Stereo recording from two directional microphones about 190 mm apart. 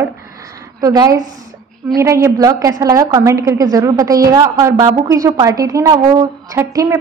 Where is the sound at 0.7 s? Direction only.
20° right (ahead or behind).